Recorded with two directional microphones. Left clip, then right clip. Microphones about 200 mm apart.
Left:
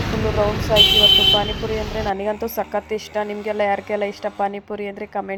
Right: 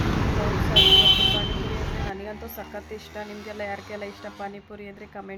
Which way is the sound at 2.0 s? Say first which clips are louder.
Left 12 dB; 35° left (ahead or behind).